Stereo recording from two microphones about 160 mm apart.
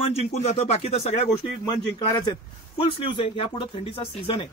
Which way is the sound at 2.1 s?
25° left (ahead or behind).